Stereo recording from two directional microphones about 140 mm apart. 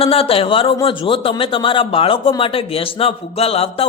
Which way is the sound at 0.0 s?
45° left (ahead or behind).